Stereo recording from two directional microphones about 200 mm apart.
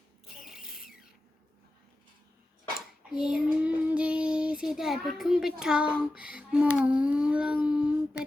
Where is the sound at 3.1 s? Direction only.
5° right (ahead or behind).